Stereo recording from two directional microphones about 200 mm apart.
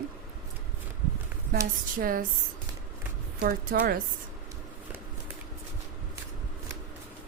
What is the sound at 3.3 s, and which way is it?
Speech, 50° right (ahead or behind).